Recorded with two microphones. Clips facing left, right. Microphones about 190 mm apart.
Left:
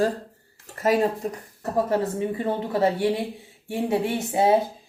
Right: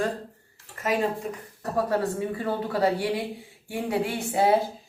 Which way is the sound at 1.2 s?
40° left (ahead or behind).